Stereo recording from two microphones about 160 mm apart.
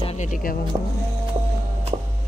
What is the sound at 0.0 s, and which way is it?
Speech, 45° left (ahead or behind).